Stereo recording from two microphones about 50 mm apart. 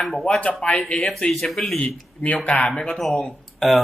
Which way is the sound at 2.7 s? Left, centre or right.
Centre.